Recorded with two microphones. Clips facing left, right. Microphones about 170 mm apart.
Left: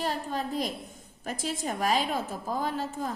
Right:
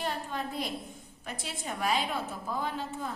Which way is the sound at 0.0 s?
40° left (ahead or behind).